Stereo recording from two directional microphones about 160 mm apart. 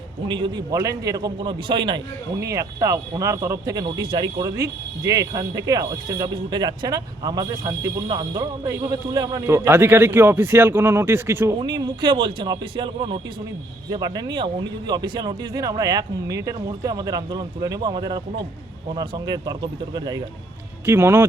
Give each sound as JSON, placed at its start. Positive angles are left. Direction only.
{"t": 0.3, "sound": "speech", "side_deg": -30}
{"t": 11.6, "sound": "speech", "side_deg": -30}
{"t": 20.8, "sound": "speech", "side_deg": -15}